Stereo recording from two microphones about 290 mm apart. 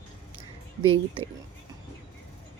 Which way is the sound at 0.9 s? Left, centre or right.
Centre.